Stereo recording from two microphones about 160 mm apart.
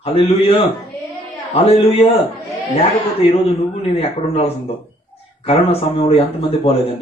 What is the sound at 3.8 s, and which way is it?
Speech, 40° left (ahead or behind).